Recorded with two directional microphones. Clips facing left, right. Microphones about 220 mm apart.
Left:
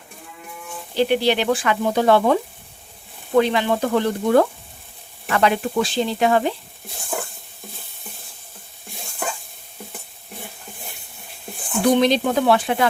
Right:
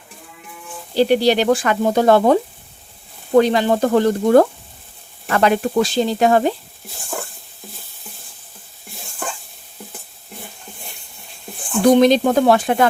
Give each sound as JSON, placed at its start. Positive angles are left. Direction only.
{"t": 0.9, "sound": "frying", "side_deg": -40}
{"t": 3.3, "sound": "sizzle", "side_deg": -40}
{"t": 11.9, "sound": "sizzle", "side_deg": -45}